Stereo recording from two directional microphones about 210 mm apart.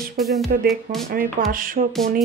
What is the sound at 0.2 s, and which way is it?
Music, centre (ahead or behind).